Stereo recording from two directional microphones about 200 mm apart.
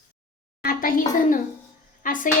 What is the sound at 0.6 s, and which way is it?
A child's voice, 45° left (ahead or behind).